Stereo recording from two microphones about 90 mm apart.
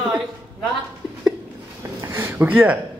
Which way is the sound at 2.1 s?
25° right (ahead or behind).